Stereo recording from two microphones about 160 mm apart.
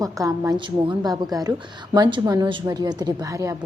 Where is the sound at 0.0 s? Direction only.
20° right (ahead or behind).